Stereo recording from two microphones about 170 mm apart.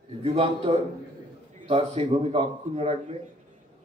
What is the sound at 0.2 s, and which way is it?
A man's voice, 35° right (ahead or behind).